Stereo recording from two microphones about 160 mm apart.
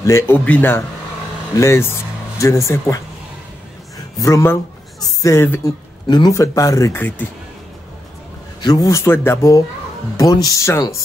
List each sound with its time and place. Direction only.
0.0 s speech: 15° left (ahead or behind)
4.2 s speech: 20° left (ahead or behind)
6.0 s speech: 25° left (ahead or behind)
8.5 s speech: 25° left (ahead or behind)